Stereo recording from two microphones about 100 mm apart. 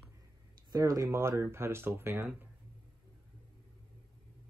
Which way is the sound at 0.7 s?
35° right (ahead or behind).